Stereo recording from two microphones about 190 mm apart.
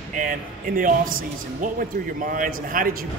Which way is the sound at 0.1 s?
45° right (ahead or behind).